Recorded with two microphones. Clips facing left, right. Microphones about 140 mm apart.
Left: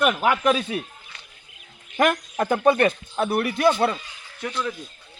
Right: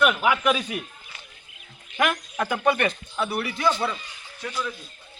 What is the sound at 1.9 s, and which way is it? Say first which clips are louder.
Speech: left 4 dB; 40° left (ahead or behind).